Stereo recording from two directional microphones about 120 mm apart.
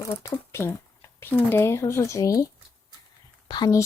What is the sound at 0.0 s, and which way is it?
Speech, 25° left (ahead or behind).